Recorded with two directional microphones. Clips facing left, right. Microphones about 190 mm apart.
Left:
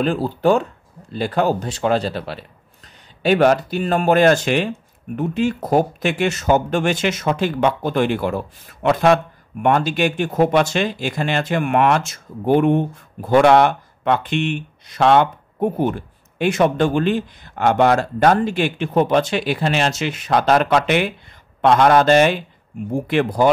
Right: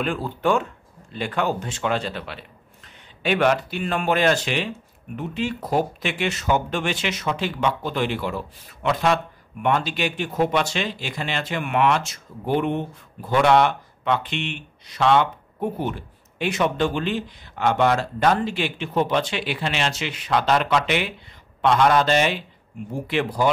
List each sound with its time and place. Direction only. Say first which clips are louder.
0.0 s speech: left 6 dB; 35° left (ahead or behind)